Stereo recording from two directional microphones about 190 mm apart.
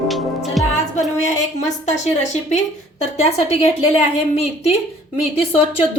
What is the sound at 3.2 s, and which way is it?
A woman's voice, 35° left (ahead or behind).